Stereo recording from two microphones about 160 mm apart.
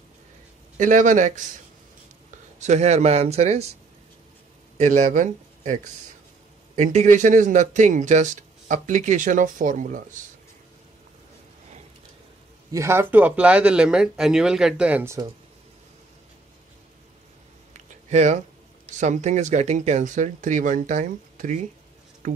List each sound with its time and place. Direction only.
0.7 s speech: 50° right (ahead or behind)
2.6 s speech: 45° right (ahead or behind)
4.7 s speech: 45° right (ahead or behind)
12.7 s speech: 15° right (ahead or behind)
17.7 s a sound: 45° right (ahead or behind)
18.9 s speech: 45° right (ahead or behind)